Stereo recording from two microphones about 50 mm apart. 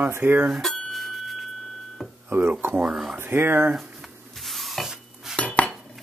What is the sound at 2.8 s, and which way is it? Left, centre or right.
Speech, centre.